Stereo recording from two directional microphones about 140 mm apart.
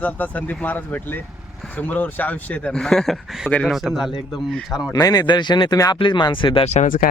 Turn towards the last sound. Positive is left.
turn(degrees=65)  # may be behind; listen again after turning